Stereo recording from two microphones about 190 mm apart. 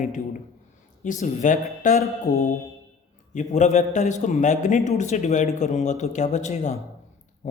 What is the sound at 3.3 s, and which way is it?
Speech, 40° left (ahead or behind).